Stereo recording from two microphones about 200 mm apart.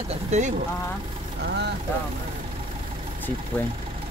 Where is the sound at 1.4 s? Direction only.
55° right (ahead or behind).